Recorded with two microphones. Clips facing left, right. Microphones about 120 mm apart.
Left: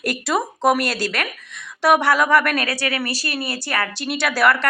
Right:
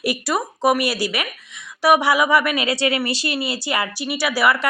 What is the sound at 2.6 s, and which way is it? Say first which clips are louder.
A woman's voice: right 4 dB; 20° right (ahead or behind).